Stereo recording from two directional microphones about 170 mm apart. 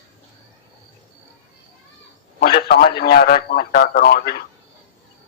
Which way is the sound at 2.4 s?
65° left (ahead or behind).